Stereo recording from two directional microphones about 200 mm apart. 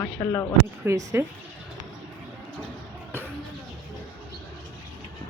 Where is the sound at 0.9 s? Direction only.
15° right (ahead or behind).